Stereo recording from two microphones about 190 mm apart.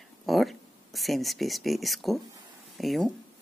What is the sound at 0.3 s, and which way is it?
Speech, centre (ahead or behind).